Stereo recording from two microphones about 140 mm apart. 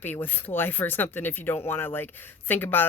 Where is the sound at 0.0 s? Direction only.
15° left (ahead or behind).